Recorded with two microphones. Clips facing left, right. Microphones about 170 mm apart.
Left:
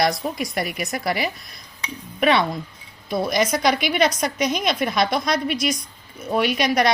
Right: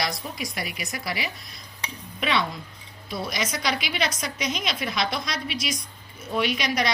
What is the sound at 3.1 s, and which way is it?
A woman's voice, 50° left (ahead or behind).